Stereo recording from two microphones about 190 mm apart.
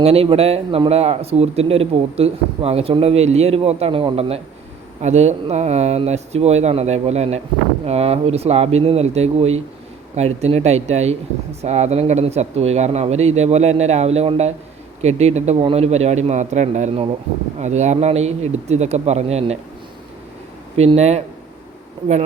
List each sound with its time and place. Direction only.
0.0 s speech: 30° right (ahead or behind)
20.7 s speech: 35° right (ahead or behind)